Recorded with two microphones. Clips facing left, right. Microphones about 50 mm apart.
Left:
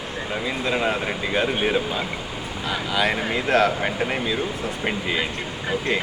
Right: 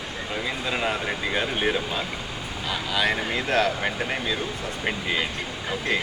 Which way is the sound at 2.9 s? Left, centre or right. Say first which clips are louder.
Left 2 dB; centre.